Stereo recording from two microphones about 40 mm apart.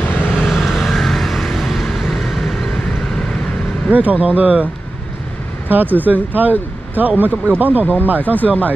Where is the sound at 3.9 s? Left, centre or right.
Right.